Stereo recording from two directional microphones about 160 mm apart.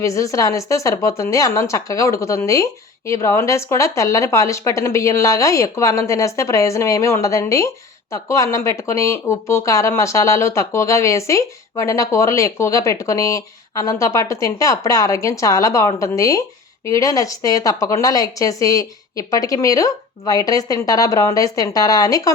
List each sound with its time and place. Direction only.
0.0 s speech: 20° left (ahead or behind)